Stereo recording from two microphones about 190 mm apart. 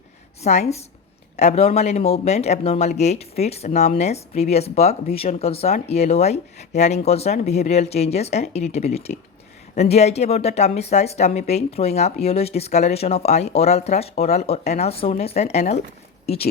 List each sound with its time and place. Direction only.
0.4 s speech: 35° left (ahead or behind)